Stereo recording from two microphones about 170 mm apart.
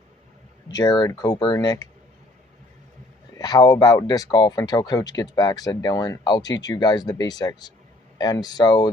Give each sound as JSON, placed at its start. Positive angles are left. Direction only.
{"t": 0.7, "sound": "speech", "side_deg": 25}
{"t": 3.3, "sound": "speech", "side_deg": 25}